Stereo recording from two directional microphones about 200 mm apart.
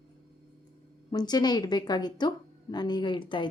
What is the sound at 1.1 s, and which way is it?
Speech, 20° left (ahead or behind).